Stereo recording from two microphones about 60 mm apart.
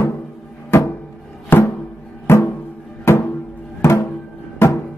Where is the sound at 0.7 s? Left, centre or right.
Left.